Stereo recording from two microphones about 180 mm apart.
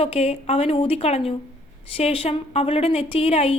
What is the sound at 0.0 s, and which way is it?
A woman's voice, 35° left (ahead or behind).